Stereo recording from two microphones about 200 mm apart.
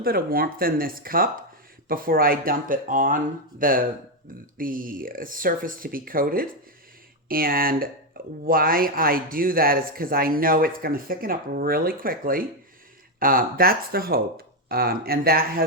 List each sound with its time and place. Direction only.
0.0 s speech: 50° right (ahead or behind)